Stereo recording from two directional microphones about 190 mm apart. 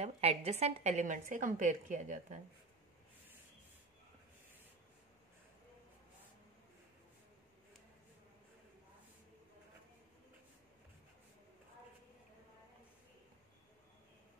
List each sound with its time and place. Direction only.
0.0 s a woman's voice: 35° right (ahead or behind)